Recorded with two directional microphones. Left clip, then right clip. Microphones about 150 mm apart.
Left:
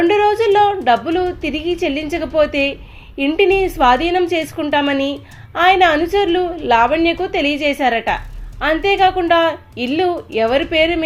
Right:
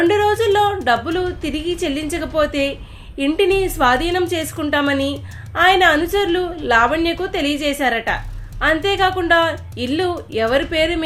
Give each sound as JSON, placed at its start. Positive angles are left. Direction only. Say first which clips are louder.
{"t": 0.0, "sound": "a woman's voice", "louder": "left 2 dB", "side_deg": 5}